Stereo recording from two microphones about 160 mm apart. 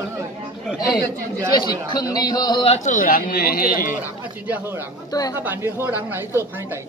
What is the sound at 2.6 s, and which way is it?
Speech, 50° left (ahead or behind).